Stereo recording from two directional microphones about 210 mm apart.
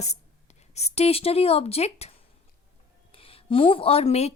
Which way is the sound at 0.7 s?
30° left (ahead or behind).